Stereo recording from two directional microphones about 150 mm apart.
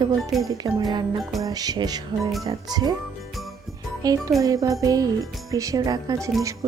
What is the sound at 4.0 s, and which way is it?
Speech, 25° right (ahead or behind).